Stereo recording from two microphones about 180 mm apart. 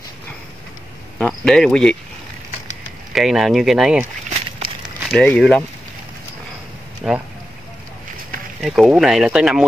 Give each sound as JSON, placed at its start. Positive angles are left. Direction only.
{"t": 1.1, "sound": "cricket", "side_deg": 5}
{"t": 3.1, "sound": "speech", "side_deg": 0}
{"t": 4.3, "sound": "a sound", "side_deg": -30}
{"t": 4.8, "sound": "speech", "side_deg": 5}
{"t": 7.0, "sound": "speech", "side_deg": -5}
{"t": 8.5, "sound": "speech", "side_deg": 0}